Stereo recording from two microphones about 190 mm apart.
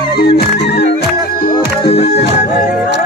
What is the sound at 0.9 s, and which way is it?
Music, 50° left (ahead or behind).